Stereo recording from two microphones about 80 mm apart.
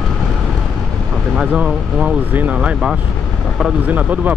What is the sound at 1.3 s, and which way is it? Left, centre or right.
Speech, centre.